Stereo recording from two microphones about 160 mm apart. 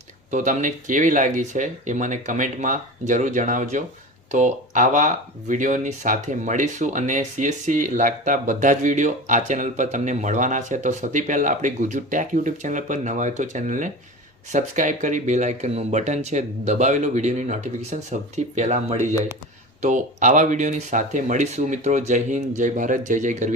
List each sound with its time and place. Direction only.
0.3 s speech: 50° right (ahead or behind)